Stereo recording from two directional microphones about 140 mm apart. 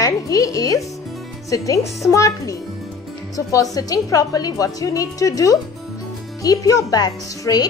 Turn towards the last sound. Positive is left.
turn(degrees=25)  # may be behind; listen again after turning